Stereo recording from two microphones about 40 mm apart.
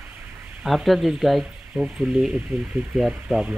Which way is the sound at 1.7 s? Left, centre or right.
Centre.